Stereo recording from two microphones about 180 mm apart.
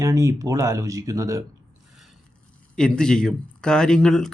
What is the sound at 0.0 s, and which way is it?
Speech, 15° right (ahead or behind).